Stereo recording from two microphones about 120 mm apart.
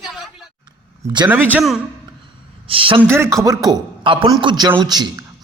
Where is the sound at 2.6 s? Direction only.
45° right (ahead or behind).